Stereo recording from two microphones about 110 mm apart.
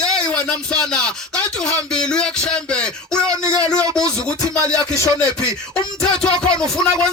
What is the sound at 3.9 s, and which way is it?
Music, 10° left (ahead or behind).